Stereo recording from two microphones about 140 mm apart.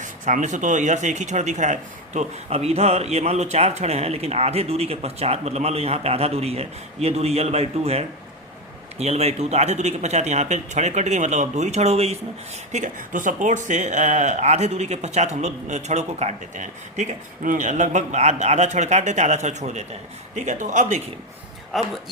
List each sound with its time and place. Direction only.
0.0 s speech: 60° right (ahead or behind)
12.7 s speech: 65° right (ahead or behind)
21.7 s speech: centre (ahead or behind)